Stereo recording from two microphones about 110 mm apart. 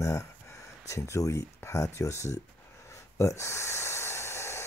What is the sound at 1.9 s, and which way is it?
Speech, 25° left (ahead or behind).